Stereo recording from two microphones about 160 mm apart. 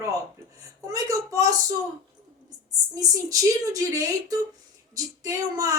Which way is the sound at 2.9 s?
20° right (ahead or behind).